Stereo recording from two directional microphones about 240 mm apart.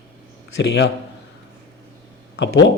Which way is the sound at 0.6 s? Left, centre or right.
Left.